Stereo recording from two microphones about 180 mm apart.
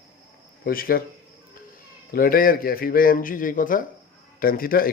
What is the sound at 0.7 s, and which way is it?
Speech, 55° left (ahead or behind).